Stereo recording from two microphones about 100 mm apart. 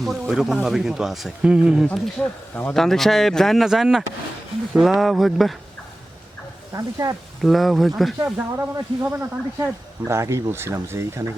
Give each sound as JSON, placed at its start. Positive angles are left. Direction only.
{"t": 0.0, "sound": "a man's voice", "side_deg": -5}
{"t": 1.9, "sound": "a man's voice", "side_deg": 10}
{"t": 6.7, "sound": "speech", "side_deg": -35}
{"t": 7.4, "sound": "a man's voice", "side_deg": 0}
{"t": 8.2, "sound": "speech", "side_deg": -25}